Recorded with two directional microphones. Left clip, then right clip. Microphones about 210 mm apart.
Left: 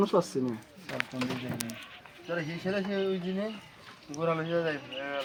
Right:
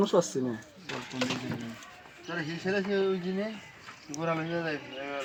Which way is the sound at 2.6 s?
20° left (ahead or behind).